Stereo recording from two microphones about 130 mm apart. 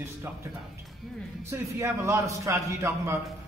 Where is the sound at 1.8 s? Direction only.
20° right (ahead or behind).